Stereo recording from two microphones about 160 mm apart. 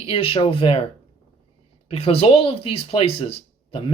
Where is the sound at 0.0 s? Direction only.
35° left (ahead or behind).